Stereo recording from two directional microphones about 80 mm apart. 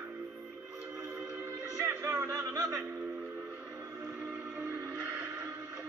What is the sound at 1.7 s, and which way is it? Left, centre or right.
Music, right.